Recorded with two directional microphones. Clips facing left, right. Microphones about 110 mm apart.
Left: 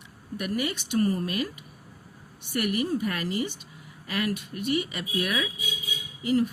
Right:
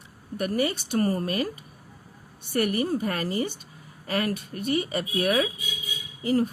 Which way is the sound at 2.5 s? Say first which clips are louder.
Right 2 dB; 40° right (ahead or behind).